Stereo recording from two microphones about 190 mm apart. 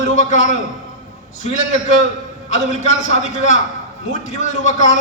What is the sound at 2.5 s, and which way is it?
A man's voice, 40° left (ahead or behind).